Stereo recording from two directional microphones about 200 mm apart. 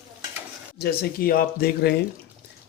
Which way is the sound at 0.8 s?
50° left (ahead or behind).